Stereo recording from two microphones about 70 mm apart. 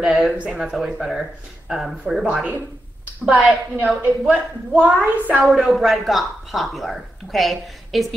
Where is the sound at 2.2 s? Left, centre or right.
Centre.